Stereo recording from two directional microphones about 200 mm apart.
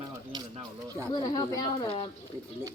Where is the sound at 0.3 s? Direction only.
20° right (ahead or behind).